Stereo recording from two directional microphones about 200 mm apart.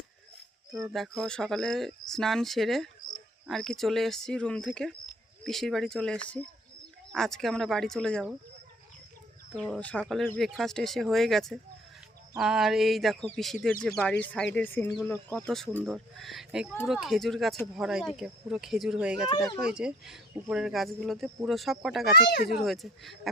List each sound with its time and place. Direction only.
0.9 s speech: centre (ahead or behind)
9.6 s speech: centre (ahead or behind)
22.1 s speech: 50° left (ahead or behind)
22.6 s speech: centre (ahead or behind)